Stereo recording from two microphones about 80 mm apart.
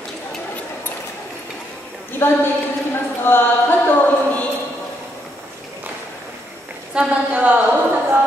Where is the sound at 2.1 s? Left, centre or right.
Left.